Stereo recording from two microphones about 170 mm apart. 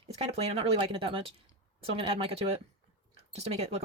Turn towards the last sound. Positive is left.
turn(degrees=-35)  # may be behind; listen again after turning